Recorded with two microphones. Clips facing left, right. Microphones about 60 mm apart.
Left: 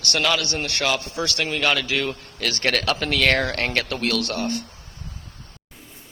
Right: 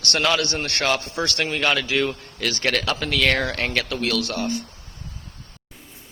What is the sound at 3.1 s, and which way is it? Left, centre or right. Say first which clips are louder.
Speech: even; centre.